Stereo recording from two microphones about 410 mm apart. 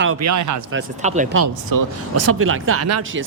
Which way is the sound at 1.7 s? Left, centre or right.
Right.